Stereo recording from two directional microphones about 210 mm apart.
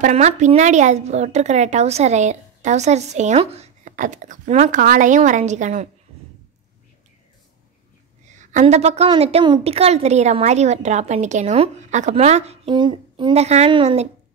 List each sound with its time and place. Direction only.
0.0 s speech: 35° right (ahead or behind)
8.3 s speech: 35° right (ahead or behind)